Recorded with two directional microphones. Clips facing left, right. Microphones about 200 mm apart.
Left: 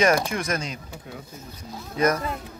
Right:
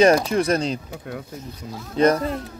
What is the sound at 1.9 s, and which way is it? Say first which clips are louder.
Speech: right 5 dB; 30° right (ahead or behind).